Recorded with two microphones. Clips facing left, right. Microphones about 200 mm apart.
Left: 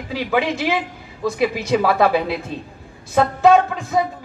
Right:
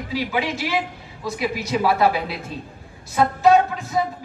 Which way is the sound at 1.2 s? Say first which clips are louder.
Left 6 dB; 55° left (ahead or behind).